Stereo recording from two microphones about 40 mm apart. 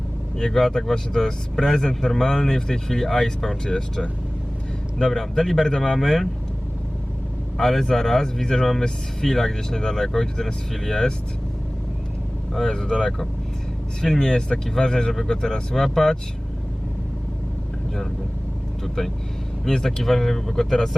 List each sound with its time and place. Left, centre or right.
0.3 s speech: centre
7.5 s speech: centre
12.6 s speech: centre
18.8 s speech: centre